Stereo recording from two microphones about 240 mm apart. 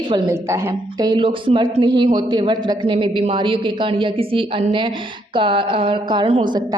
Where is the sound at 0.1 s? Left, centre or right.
Centre.